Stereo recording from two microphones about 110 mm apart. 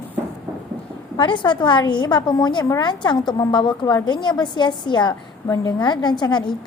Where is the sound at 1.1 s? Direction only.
45° left (ahead or behind).